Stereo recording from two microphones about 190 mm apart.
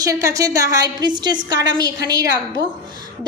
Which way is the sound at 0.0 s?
20° right (ahead or behind).